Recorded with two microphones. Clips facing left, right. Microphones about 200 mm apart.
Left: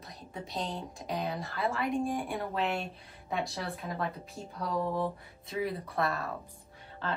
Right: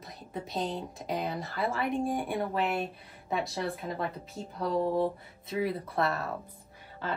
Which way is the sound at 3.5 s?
25° right (ahead or behind).